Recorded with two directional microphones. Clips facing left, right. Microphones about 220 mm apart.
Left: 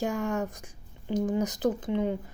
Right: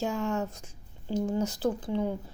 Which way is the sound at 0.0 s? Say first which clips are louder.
Left 1 dB; 55° left (ahead or behind).